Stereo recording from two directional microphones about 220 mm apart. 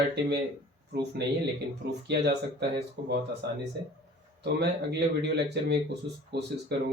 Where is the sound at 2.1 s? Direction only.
50° right (ahead or behind).